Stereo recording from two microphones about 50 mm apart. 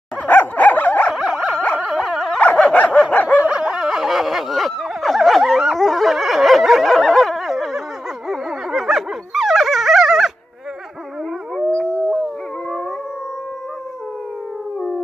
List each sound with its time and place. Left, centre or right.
0.3 s dog: left
1.1 s dog: centre
2.5 s dog: left
3.3 s a sound: right; by 10.3 s centre
11.5 s howl: centre